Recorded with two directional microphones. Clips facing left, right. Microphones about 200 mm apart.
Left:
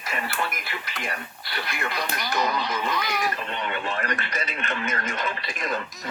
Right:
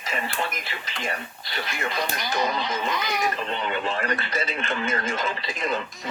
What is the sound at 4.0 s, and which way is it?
Speech, 30° right (ahead or behind).